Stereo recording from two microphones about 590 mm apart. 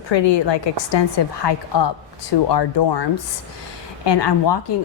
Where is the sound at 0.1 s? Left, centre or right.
Left.